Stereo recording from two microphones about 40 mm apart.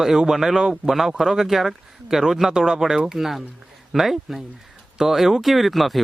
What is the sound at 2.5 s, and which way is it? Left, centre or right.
Speech, centre.